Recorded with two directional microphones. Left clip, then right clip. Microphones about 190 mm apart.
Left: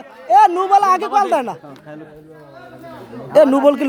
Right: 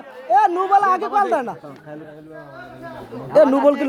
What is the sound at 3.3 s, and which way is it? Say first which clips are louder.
Speech: left 2 dB; 10° left (ahead or behind).